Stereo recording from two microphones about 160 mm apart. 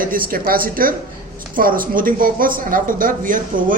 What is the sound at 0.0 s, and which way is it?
Speech, 60° right (ahead or behind).